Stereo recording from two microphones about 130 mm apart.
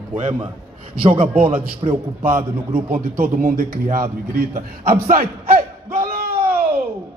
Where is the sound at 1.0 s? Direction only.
45° right (ahead or behind).